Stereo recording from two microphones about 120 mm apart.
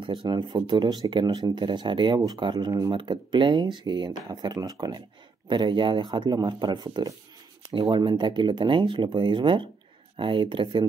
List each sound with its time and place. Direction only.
0.0 s speech: 50° right (ahead or behind)